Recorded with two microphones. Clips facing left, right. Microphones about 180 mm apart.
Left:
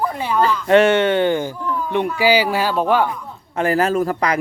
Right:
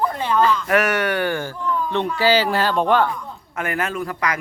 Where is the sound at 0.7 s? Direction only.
25° left (ahead or behind); by 3.2 s 10° left (ahead or behind).